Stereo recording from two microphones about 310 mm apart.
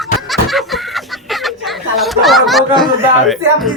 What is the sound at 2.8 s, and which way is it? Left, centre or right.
Speech, centre.